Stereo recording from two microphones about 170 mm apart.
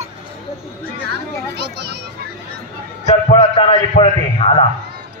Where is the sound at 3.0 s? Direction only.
40° left (ahead or behind).